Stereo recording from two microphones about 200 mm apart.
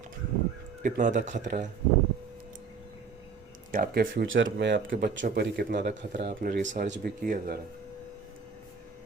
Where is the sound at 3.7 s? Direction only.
45° right (ahead or behind).